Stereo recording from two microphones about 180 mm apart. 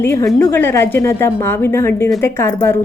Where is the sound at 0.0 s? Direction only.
15° left (ahead or behind).